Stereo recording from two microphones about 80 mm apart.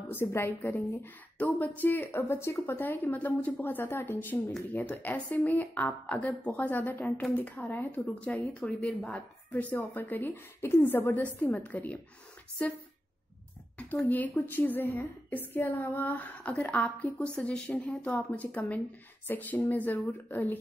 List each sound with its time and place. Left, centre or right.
0.1 s a woman's voice: left; by 9.2 s centre
9.5 s a woman's voice: left
14.0 s a woman's voice: left